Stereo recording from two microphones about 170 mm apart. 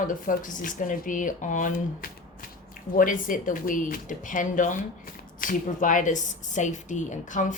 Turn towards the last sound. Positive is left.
turn(degrees=50)  # may be behind; listen again after turning